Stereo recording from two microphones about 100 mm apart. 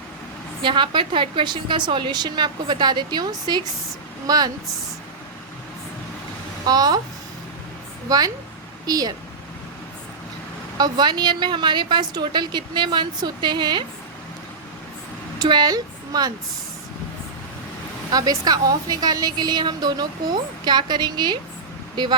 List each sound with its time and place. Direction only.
0.6 s a woman's voice: 55° right (ahead or behind)
6.7 s speech: 40° right (ahead or behind)
8.1 s speech: 35° right (ahead or behind)
10.8 s a woman's voice: 45° right (ahead or behind)
15.4 s speech: 45° right (ahead or behind)
18.1 s a woman's voice: 40° right (ahead or behind)